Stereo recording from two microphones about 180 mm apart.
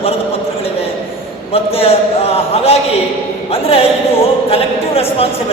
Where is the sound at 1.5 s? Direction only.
30° left (ahead or behind).